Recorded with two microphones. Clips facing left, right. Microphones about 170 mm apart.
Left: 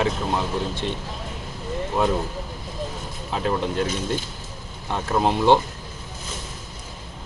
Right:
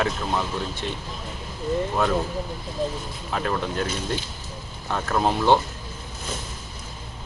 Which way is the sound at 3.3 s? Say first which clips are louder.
Left 2 dB; 20° left (ahead or behind).